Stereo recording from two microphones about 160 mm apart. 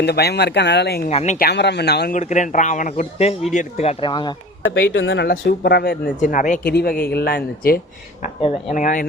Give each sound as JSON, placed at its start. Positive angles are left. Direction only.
{"t": 0.0, "sound": "speech", "side_deg": 90}
{"t": 1.1, "sound": "a man's voice", "side_deg": 45}
{"t": 1.4, "sound": "speech", "side_deg": 90}
{"t": 2.1, "sound": "a man's voice", "side_deg": 50}
{"t": 4.0, "sound": "speech", "side_deg": 30}
{"t": 4.9, "sound": "speech", "side_deg": 90}
{"t": 6.1, "sound": "a man's voice", "side_deg": 50}
{"t": 6.7, "sound": "speech", "side_deg": 70}
{"t": 8.7, "sound": "a man's voice", "side_deg": 55}